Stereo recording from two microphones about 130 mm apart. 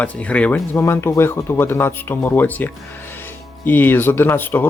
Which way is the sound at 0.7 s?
20° left (ahead or behind).